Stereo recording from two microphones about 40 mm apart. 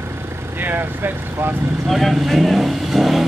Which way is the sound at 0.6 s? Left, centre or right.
Right.